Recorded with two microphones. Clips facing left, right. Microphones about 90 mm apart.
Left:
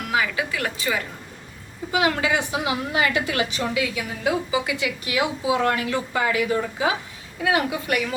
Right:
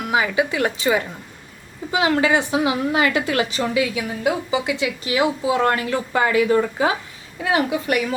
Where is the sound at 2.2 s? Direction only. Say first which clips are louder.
Right 5 dB; 35° right (ahead or behind).